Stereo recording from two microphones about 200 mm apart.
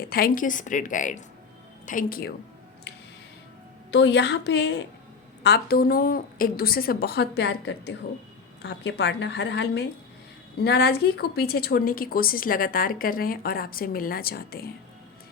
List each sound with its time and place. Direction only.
0.0 s a woman's voice: 50° left (ahead or behind)
2.9 s a sound: 60° left (ahead or behind)
3.9 s a woman's voice: 60° left (ahead or behind)